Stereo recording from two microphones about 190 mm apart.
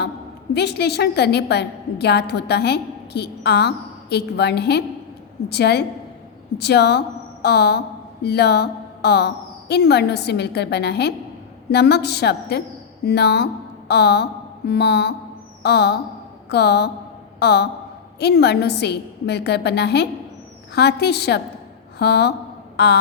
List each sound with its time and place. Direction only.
0.5 s a woman's voice: 60° left (ahead or behind)